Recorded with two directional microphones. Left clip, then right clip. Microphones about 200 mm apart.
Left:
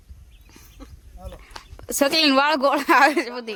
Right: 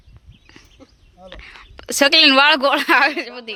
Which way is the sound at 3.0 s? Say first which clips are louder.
Left 1 dB; 25° left (ahead or behind).